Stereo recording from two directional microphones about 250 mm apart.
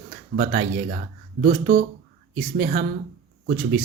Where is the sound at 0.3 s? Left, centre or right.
Right.